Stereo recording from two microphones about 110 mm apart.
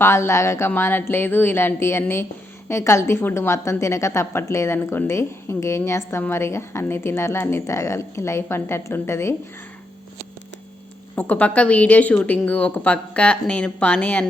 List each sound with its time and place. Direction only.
0.0 s a woman's voice: 25° left (ahead or behind)
11.1 s a woman's voice: 15° left (ahead or behind)